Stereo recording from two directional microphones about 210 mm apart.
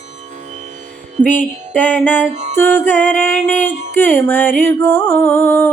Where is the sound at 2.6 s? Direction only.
10° left (ahead or behind).